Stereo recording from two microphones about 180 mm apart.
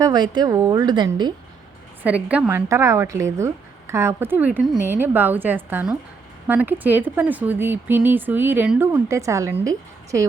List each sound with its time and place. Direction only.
0.0 s a woman's voice: 25° right (ahead or behind)
2.0 s speech: 10° right (ahead or behind)